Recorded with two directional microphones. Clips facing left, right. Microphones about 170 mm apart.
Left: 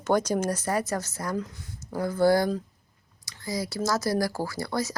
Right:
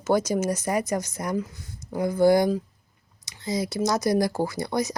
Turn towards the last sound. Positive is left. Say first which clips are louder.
# right 4 dB
turn(degrees=-20)  # may be behind; listen again after turning